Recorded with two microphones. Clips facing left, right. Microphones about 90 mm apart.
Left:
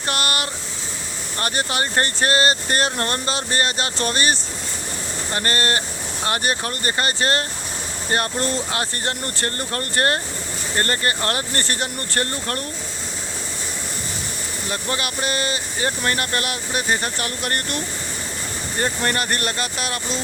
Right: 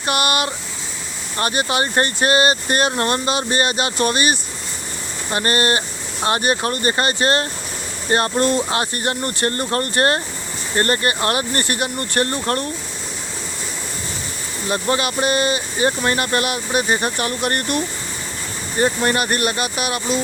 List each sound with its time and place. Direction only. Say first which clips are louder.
0.0 s speech: right 5 dB; 20° right (ahead or behind)
14.7 s speech: right 7 dB; 25° right (ahead or behind)